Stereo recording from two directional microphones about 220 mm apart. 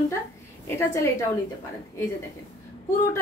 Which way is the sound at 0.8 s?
15° left (ahead or behind).